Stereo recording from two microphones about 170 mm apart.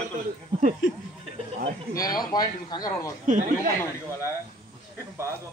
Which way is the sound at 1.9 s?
20° left (ahead or behind).